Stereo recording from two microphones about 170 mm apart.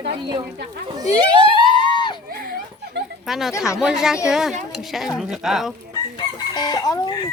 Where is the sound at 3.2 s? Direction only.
Centre (ahead or behind).